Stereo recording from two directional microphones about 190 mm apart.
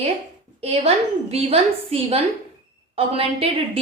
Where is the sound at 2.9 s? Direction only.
30° right (ahead or behind).